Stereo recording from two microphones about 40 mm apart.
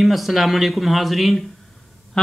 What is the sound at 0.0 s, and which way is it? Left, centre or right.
A man's voice, centre.